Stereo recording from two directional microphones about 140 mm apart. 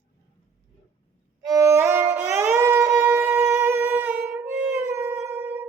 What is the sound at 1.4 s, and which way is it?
Music, 20° right (ahead or behind).